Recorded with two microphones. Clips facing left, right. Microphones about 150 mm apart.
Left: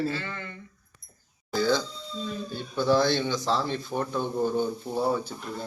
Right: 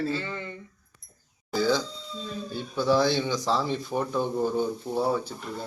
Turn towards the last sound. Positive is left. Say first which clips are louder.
# right 1 dB
turn(degrees=0)  # may be behind; listen again after turning